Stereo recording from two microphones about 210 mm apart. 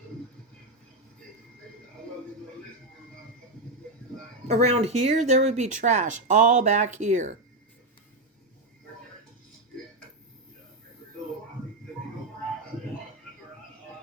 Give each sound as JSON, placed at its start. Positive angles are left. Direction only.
{"t": 4.4, "sound": "speech", "side_deg": -30}